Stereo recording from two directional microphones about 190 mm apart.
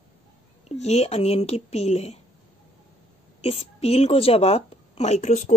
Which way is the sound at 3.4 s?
30° left (ahead or behind).